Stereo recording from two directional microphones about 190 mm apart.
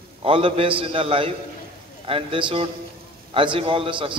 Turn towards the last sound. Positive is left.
turn(degrees=-25)  # may be behind; listen again after turning